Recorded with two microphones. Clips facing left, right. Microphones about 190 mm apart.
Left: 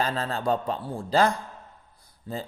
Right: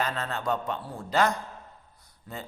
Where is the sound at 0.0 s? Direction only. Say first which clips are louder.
Left 3 dB; 30° left (ahead or behind).